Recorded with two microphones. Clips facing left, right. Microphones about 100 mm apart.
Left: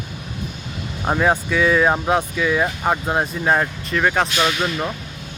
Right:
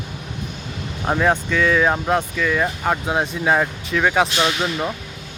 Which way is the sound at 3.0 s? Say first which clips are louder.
Even; centre (ahead or behind).